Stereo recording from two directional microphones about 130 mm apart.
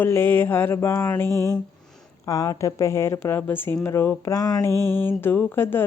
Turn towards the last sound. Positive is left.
turn(degrees=15)  # may be behind; listen again after turning